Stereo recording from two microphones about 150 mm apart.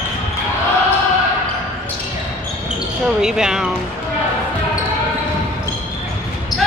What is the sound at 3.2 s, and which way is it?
Speech, 5° right (ahead or behind).